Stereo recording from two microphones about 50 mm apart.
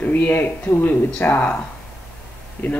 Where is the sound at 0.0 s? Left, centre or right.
Left.